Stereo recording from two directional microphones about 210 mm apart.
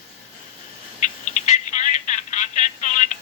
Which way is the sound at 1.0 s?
35° left (ahead or behind).